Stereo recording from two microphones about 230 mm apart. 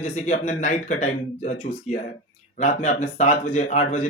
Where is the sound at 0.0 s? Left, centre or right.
Left.